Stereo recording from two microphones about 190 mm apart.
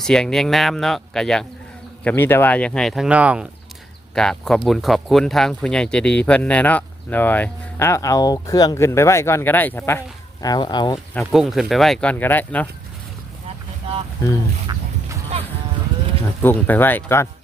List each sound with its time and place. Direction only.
0.0 s speech: 5° left (ahead or behind); by 11.0 s 25° left (ahead or behind)
11.1 s speech: centre (ahead or behind)
14.7 s fowl: 20° right (ahead or behind)
16.4 s speech: 10° left (ahead or behind)